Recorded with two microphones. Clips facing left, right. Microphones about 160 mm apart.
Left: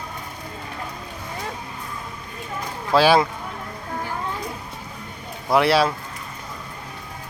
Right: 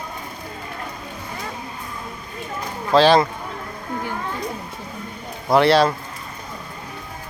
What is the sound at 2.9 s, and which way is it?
Speech, 10° left (ahead or behind).